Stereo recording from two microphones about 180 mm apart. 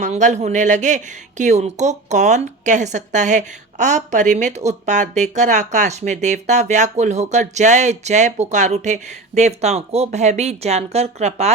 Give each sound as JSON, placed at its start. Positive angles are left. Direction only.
{"t": 0.0, "sound": "speech", "side_deg": -40}